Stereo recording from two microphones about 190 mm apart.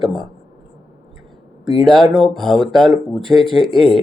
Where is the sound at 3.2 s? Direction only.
25° right (ahead or behind).